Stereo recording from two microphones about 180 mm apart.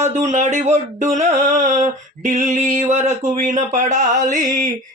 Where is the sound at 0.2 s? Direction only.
40° right (ahead or behind).